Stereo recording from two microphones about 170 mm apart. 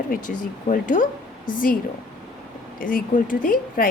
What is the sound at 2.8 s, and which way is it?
Speech, 55° left (ahead or behind).